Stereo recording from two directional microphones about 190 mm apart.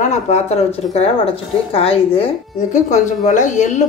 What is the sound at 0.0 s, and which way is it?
A woman's voice, 35° left (ahead or behind).